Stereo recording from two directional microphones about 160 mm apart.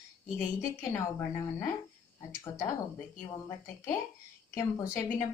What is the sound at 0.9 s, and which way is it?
Speech, 15° left (ahead or behind).